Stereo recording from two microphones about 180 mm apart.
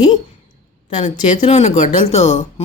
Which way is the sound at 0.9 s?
40° left (ahead or behind).